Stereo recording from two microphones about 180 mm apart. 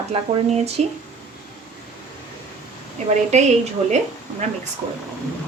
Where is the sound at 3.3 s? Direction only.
40° right (ahead or behind).